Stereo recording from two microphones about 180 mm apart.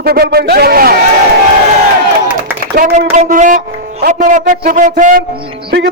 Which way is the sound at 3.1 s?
45° right (ahead or behind).